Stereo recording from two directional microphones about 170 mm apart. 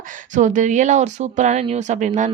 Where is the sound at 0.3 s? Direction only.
45° right (ahead or behind).